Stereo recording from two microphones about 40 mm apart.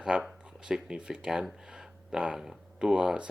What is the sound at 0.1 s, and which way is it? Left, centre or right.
Speech, right.